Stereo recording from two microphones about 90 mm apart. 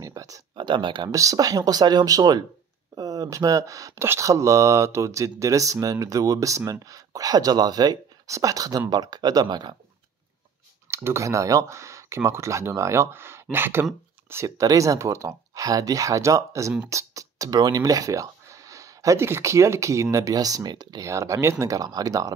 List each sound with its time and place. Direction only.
0.0 s a sound: 40° right (ahead or behind)
0.6 s speech: 60° right (ahead or behind)
1.1 s speech: 40° right (ahead or behind)
10.9 s speech: 30° right (ahead or behind)
14.3 s speech: 35° right (ahead or behind)
21.0 s speech: 35° right (ahead or behind)